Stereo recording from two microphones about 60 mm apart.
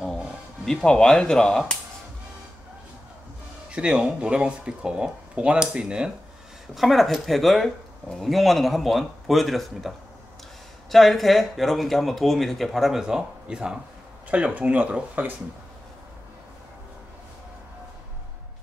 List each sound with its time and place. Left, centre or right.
0.8 s speech: centre
3.7 s speech: centre
6.7 s speech: centre; by 15.3 s right